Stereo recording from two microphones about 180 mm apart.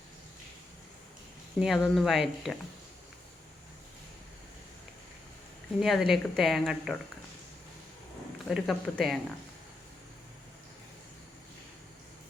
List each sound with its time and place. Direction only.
1.5 s a woman's voice: centre (ahead or behind)
5.8 s a woman's voice: centre (ahead or behind)
8.4 s a woman's voice: centre (ahead or behind)